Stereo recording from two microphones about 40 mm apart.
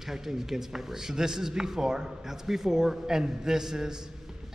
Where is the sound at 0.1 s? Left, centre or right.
Centre.